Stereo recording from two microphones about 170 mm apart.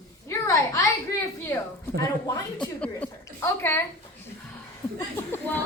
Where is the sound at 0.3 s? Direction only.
15° left (ahead or behind).